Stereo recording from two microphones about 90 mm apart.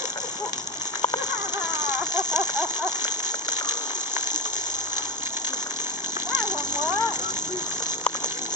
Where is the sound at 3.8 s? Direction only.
25° right (ahead or behind).